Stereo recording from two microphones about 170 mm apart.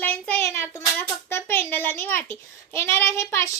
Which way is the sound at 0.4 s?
15° left (ahead or behind).